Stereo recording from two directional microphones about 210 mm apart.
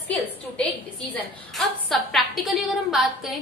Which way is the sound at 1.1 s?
Centre (ahead or behind).